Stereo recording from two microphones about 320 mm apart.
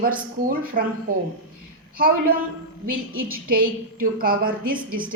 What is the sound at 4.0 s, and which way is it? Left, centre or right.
Speech, right.